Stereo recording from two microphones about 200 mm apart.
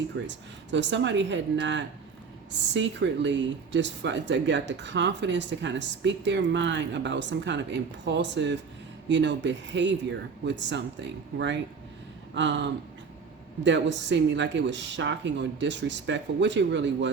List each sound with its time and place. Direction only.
0.3 s speech: 65° right (ahead or behind)
13.7 s speech: 60° right (ahead or behind)